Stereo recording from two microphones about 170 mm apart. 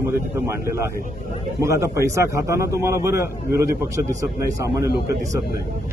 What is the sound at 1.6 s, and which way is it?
A man's voice, 15° right (ahead or behind).